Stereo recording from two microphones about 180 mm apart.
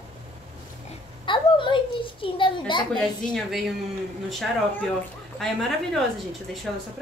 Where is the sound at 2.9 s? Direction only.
Centre (ahead or behind).